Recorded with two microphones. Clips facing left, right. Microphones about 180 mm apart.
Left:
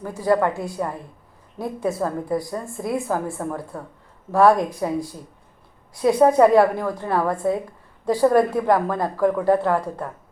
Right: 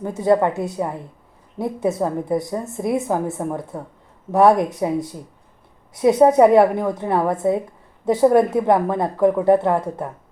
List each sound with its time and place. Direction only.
0.0 s a woman's voice: 25° right (ahead or behind)